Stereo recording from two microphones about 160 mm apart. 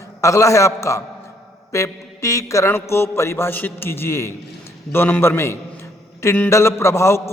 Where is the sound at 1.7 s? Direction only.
20° left (ahead or behind).